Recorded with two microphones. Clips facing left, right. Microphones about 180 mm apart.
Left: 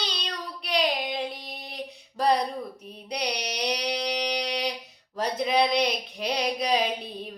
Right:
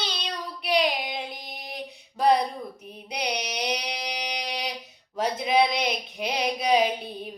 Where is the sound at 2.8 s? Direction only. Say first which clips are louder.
Even; 5° right (ahead or behind).